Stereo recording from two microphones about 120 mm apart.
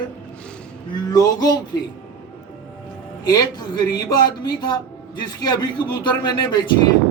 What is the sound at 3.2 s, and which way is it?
Speech, 30° left (ahead or behind).